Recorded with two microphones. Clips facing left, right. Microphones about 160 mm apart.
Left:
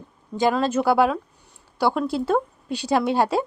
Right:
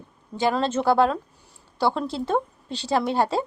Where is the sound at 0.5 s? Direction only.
10° left (ahead or behind).